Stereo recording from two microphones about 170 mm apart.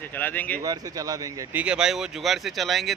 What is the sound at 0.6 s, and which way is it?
Speech, 20° right (ahead or behind).